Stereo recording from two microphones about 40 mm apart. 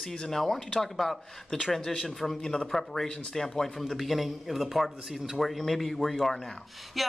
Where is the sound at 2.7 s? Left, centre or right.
Centre.